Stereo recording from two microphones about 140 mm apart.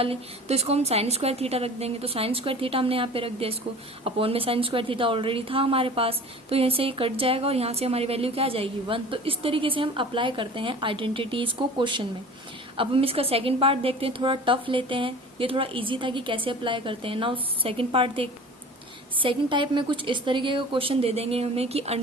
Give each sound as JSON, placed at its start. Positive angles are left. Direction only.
{"t": 0.0, "sound": "a woman's voice", "side_deg": -45}